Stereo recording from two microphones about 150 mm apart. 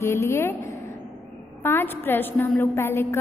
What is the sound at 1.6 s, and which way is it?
A woman's voice, 15° left (ahead or behind).